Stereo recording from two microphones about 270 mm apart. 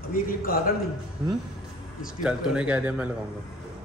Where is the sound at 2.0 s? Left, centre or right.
Centre.